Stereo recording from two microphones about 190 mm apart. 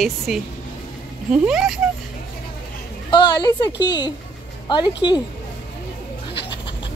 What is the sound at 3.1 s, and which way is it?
A woman's voice, 20° left (ahead or behind).